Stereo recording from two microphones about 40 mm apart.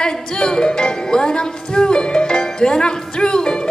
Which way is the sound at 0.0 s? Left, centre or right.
Centre.